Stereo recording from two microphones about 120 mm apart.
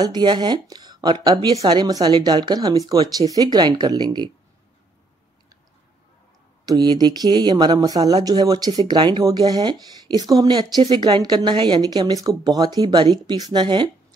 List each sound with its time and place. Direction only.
0.0 s speech: 35° right (ahead or behind)
6.6 s speech: 35° right (ahead or behind)